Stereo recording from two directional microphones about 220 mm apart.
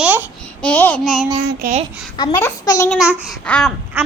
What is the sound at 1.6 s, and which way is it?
Speech, 40° right (ahead or behind).